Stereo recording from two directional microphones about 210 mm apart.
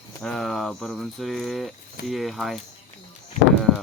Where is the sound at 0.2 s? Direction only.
Centre (ahead or behind).